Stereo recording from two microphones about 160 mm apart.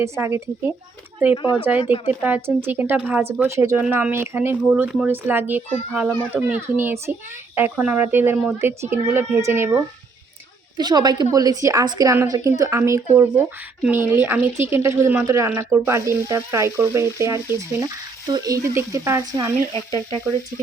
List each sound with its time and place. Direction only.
0.0 s a woman's voice: 15° right (ahead or behind)
10.8 s a woman's voice: 25° right (ahead or behind)